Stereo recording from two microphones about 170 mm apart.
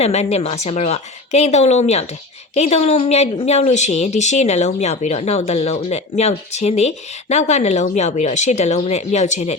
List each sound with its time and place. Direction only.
0.0 s speech: 40° left (ahead or behind)